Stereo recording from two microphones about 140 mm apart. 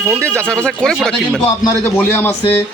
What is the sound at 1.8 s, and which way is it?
Speech, 15° left (ahead or behind).